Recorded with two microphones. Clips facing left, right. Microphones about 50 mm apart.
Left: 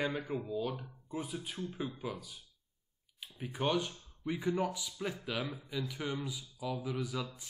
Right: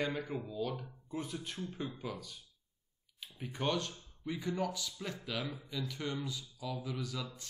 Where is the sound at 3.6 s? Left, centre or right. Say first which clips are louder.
Left 2 dB; centre.